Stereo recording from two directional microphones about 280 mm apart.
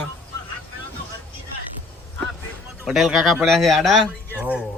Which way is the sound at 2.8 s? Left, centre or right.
Centre.